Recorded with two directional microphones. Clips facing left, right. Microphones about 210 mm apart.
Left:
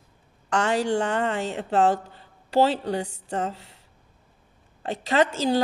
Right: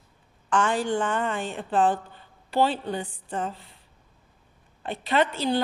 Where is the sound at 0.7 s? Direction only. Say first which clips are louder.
Left 2 dB; 70° left (ahead or behind).